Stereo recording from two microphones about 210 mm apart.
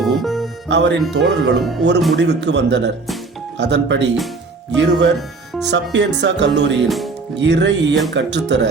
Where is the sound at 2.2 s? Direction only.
55° right (ahead or behind).